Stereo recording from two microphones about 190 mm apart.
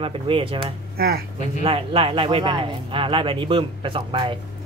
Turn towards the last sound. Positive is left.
turn(degrees=-25)  # may be behind; listen again after turning